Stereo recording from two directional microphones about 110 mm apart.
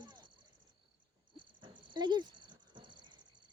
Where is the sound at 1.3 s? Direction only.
45° right (ahead or behind).